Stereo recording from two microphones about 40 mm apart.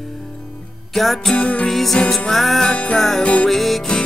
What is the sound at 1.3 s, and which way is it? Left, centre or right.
Music, left.